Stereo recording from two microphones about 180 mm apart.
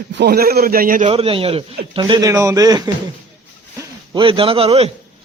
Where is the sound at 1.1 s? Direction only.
30° right (ahead or behind).